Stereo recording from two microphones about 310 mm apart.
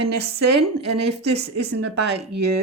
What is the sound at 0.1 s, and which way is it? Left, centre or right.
Speech, right.